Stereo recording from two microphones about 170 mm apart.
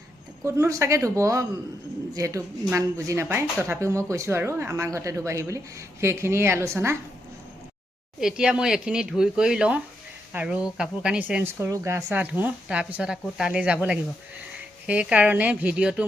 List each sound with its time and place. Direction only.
0.4 s speech: 15° right (ahead or behind)
8.2 s speech: 5° right (ahead or behind)
14.8 s speech: 5° right (ahead or behind)